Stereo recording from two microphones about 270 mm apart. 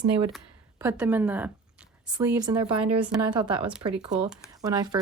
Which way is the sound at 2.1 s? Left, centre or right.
Centre.